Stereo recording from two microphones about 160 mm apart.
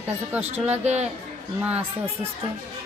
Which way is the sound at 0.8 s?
45° right (ahead or behind).